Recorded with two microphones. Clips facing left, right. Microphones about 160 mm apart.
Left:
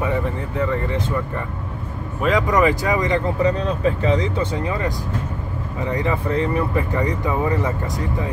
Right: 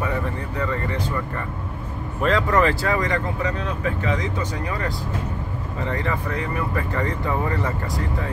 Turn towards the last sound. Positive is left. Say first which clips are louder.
# left 3 dB
turn(degrees=15)  # may be behind; listen again after turning